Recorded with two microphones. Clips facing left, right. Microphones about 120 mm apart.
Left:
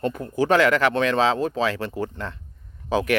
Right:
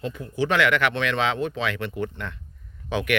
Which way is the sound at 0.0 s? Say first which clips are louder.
Left 3 dB; 45° left (ahead or behind).